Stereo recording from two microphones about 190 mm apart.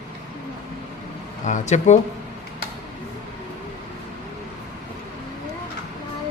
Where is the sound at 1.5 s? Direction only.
40° left (ahead or behind).